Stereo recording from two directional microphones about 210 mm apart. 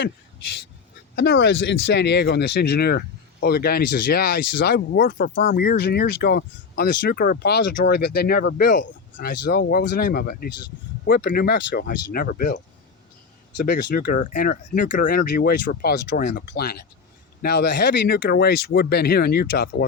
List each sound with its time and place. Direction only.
1.1 s speech: 50° left (ahead or behind)